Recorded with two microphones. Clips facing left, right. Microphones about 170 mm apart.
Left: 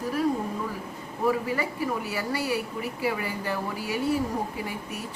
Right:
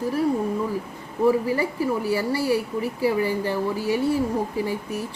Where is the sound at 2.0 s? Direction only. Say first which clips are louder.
Right 6 dB; 30° right (ahead or behind).